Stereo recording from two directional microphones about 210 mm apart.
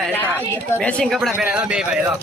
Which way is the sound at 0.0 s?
10° left (ahead or behind).